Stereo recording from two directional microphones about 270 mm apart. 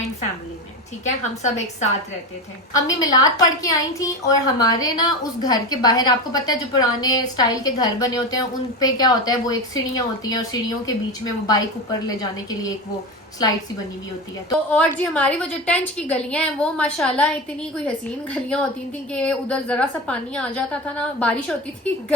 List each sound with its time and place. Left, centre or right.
1.0 s a woman's voice: left
2.7 s a woman's voice: centre
12.0 s a woman's voice: centre
14.7 s a woman's voice: centre